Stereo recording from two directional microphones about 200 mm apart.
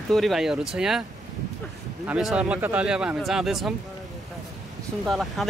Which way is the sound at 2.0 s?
5° right (ahead or behind).